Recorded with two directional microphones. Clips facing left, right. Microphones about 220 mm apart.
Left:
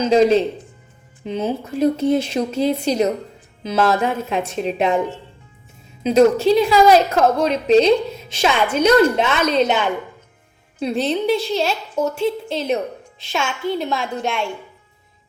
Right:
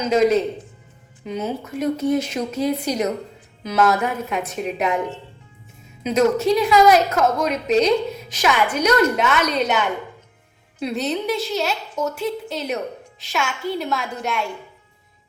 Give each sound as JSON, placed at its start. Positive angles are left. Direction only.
{"t": 0.0, "sound": "a woman's voice", "side_deg": 30}
{"t": 6.0, "sound": "a woman's voice", "side_deg": 30}